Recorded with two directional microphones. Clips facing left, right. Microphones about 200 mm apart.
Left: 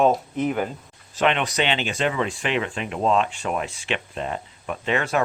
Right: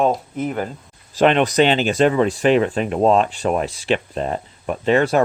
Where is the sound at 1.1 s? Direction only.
40° right (ahead or behind).